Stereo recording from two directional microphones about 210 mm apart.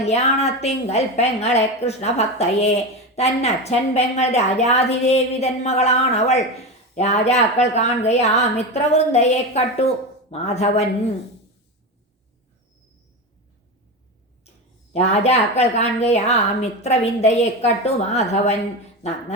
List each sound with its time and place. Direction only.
0.0 s a woman's voice: 30° left (ahead or behind)
14.9 s a woman's voice: 30° left (ahead or behind)